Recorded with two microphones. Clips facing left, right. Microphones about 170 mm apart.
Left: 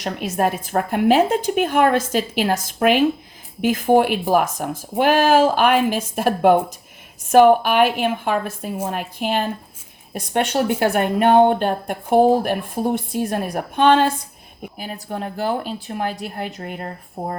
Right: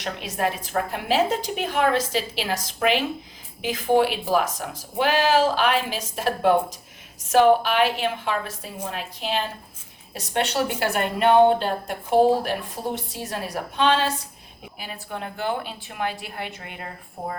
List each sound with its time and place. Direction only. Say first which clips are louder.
0.0 s speech: left 5 dB; 50° left (ahead or behind)
14.8 s speech: left 5 dB; 40° left (ahead or behind)